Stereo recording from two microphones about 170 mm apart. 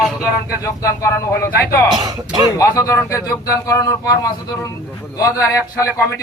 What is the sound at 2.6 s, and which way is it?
Speech, 20° left (ahead or behind).